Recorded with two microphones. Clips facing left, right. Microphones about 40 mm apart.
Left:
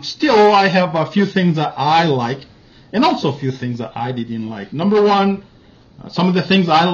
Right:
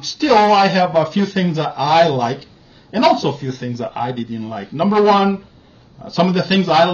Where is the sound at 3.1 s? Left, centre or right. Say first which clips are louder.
Even; left.